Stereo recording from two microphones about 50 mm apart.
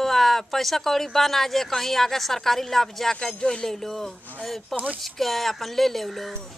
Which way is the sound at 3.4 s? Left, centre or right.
Left.